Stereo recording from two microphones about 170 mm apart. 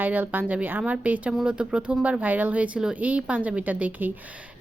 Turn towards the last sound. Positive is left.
turn(degrees=-10)  # may be behind; listen again after turning